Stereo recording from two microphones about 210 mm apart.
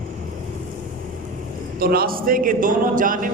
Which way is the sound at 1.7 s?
45° right (ahead or behind).